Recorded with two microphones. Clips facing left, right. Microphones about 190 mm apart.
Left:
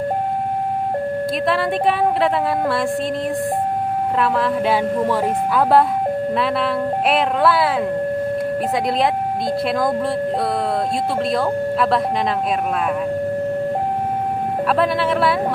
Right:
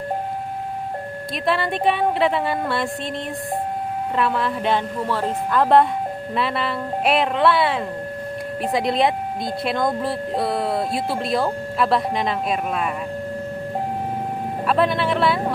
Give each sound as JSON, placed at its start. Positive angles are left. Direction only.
{"t": 1.5, "sound": "speech", "side_deg": 0}
{"t": 4.2, "sound": "speech", "side_deg": 0}
{"t": 5.0, "sound": "speech", "side_deg": 15}
{"t": 6.3, "sound": "speech", "side_deg": 0}
{"t": 11.3, "sound": "speech", "side_deg": 0}
{"t": 14.7, "sound": "speech", "side_deg": 0}